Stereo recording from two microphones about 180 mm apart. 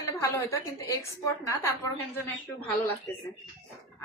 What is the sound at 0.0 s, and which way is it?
A woman's voice, 15° left (ahead or behind).